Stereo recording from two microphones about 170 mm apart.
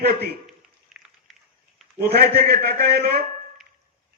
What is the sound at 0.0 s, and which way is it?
Speech, 70° right (ahead or behind).